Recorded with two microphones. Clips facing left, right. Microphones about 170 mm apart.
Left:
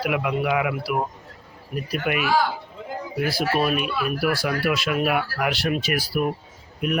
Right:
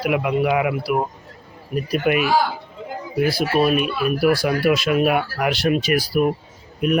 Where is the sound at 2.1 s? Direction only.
25° right (ahead or behind).